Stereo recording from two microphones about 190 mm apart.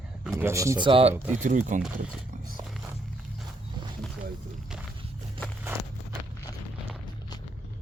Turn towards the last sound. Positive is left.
turn(degrees=-10)  # may be behind; listen again after turning